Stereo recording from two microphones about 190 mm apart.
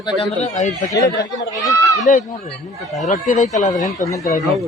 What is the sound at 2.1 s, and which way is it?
Speech, 40° left (ahead or behind).